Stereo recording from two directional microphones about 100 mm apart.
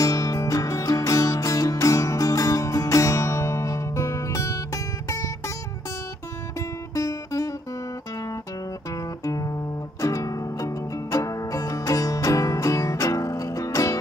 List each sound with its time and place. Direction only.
0.0 s music: 35° left (ahead or behind)
7.0 s music: 35° left (ahead or behind)
9.2 s music: 35° left (ahead or behind)